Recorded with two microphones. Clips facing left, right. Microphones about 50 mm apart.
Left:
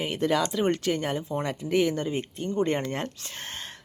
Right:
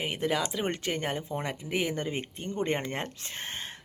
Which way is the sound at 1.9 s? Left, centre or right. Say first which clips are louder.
Left 4 dB; right.